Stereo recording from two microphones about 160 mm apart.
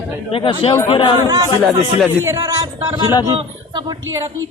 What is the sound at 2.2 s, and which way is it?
Speech, 20° right (ahead or behind).